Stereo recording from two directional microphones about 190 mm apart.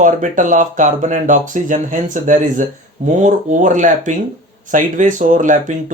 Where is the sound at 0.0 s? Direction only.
40° right (ahead or behind).